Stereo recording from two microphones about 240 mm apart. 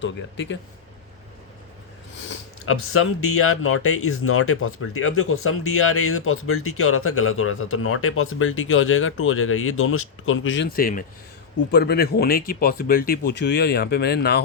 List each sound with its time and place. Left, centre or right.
0.0 s speech: left
2.6 s speech: left